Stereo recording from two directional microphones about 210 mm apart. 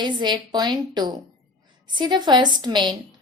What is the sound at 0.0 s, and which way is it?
A woman's voice, 20° right (ahead or behind).